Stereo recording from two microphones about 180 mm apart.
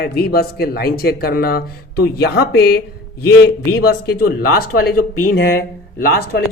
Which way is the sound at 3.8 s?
60° left (ahead or behind).